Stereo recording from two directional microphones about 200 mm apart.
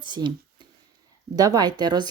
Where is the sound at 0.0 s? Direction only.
20° right (ahead or behind).